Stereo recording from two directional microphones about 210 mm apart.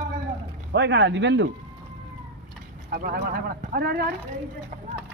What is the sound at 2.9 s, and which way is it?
Speech, 45° right (ahead or behind).